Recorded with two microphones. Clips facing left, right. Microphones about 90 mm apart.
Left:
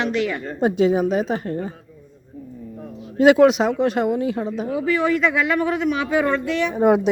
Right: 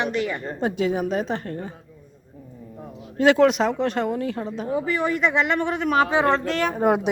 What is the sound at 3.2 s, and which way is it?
Speech, 10° left (ahead or behind).